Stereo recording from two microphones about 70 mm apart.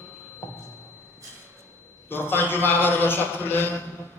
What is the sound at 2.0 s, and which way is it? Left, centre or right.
A man's voice, left.